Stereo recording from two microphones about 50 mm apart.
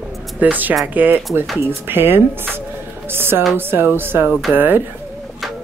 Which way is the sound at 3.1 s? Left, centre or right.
Right.